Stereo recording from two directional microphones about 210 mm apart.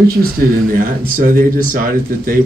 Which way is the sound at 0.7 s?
40° right (ahead or behind).